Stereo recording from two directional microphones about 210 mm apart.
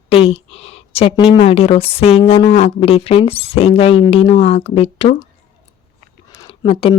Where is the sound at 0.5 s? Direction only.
30° left (ahead or behind).